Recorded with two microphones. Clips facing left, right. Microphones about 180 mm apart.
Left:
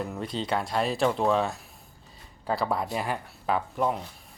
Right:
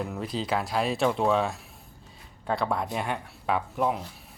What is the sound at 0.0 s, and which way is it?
Speech, centre (ahead or behind).